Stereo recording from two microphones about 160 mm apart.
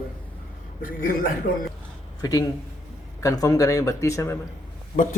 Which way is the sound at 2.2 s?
25° left (ahead or behind).